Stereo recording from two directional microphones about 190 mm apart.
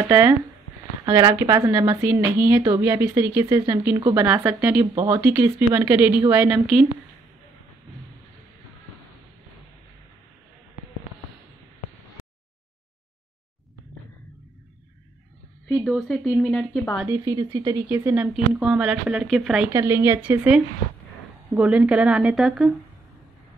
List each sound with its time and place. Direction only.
0.0 s speech: 10° right (ahead or behind)
15.7 s speech: centre (ahead or behind)
17.0 s speech: 15° right (ahead or behind)
17.8 s speech: 10° right (ahead or behind)
19.7 s speech: 15° right (ahead or behind)